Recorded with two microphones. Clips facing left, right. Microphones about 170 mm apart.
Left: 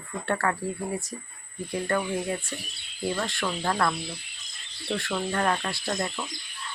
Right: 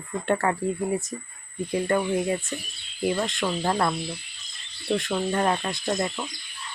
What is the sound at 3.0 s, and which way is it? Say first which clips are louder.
Speech: right 4 dB; 20° right (ahead or behind).